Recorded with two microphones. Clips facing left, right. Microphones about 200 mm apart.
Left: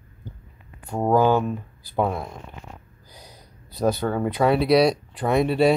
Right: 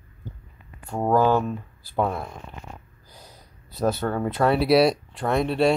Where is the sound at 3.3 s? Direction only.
5° right (ahead or behind).